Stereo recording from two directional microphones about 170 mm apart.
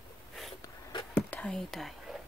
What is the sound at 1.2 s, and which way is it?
Whispering, 10° left (ahead or behind).